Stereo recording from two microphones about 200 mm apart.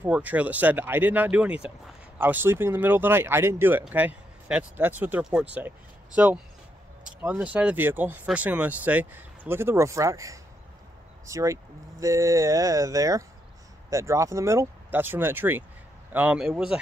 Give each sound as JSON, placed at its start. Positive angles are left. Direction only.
{"t": 0.0, "sound": "speech", "side_deg": -10}